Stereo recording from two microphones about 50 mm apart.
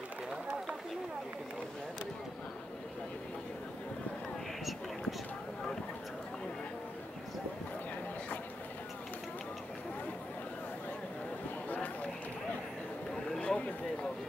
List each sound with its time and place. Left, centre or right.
0.3 s run: centre
11.7 s run: left
13.4 s a sound: left